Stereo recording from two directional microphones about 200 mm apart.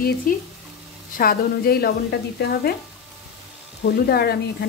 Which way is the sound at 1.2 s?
50° left (ahead or behind).